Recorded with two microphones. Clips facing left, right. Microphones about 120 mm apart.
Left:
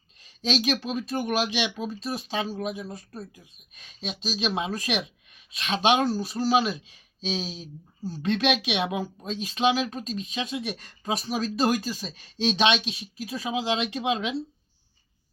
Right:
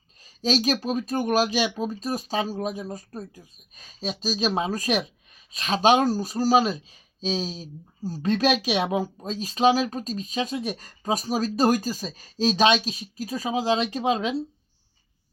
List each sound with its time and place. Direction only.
0.4 s speech: 40° right (ahead or behind)